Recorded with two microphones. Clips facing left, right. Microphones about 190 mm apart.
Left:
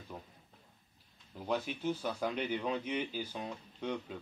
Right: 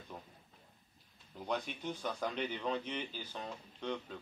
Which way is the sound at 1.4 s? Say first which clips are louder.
Left 4 dB; 5° left (ahead or behind).